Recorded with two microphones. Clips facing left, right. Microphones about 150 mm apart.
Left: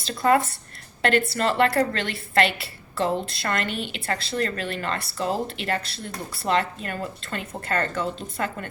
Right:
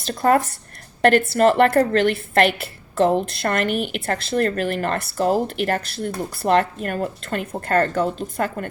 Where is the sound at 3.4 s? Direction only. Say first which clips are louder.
Right 6 dB; 50° right (ahead or behind).